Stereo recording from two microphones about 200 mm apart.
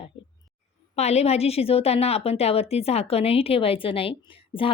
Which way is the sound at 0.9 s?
30° left (ahead or behind).